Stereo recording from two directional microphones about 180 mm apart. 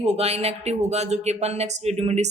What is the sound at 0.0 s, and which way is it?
Speech, 35° right (ahead or behind).